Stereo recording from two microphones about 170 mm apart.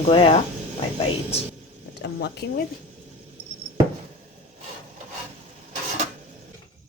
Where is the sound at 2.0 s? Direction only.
75° left (ahead or behind).